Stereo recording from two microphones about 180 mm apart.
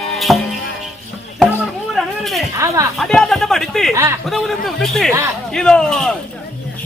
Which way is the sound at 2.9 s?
Centre (ahead or behind).